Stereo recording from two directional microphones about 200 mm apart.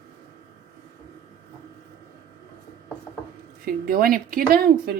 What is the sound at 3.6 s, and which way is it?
A woman's voice, 45° right (ahead or behind).